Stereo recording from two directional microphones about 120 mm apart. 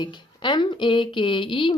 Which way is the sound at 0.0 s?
40° left (ahead or behind).